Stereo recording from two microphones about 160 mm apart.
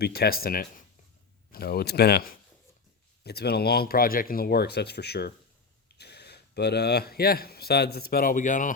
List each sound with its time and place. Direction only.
0.0 s speech: 75° left (ahead or behind)
3.2 s speech: 90° left; by 8.7 s 55° left (ahead or behind)